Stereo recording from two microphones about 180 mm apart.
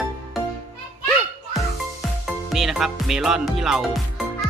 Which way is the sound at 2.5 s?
Centre (ahead or behind).